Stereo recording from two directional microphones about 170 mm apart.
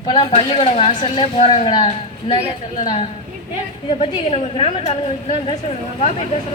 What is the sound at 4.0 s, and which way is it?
Speech, 35° left (ahead or behind).